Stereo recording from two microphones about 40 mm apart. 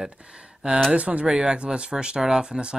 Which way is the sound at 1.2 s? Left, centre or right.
Centre.